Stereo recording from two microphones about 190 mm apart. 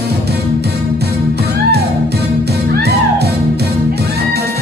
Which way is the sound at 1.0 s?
60° right (ahead or behind).